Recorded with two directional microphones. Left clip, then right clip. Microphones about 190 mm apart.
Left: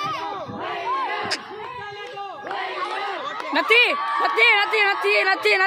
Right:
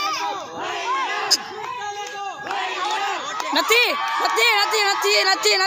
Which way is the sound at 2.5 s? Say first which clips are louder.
Right 3 dB; 40° right (ahead or behind).